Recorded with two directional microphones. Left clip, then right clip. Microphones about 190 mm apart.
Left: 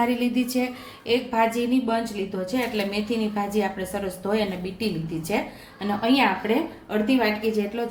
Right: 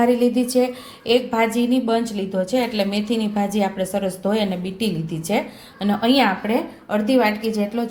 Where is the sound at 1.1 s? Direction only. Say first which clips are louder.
Right 4 dB; 45° right (ahead or behind).